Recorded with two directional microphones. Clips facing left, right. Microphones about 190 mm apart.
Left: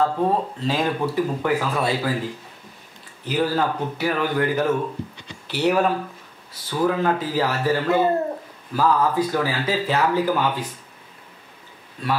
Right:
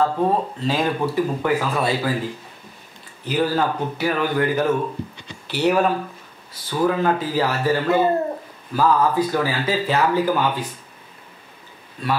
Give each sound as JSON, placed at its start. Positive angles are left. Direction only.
{"t": 0.0, "sound": "speech", "side_deg": -20}
{"t": 0.7, "sound": "speech", "side_deg": -10}
{"t": 1.0, "sound": "speech", "side_deg": -25}
{"t": 3.3, "sound": "speech", "side_deg": -10}